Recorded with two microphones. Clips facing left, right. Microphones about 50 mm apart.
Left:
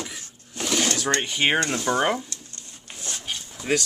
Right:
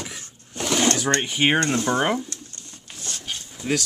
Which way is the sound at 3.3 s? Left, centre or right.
Centre.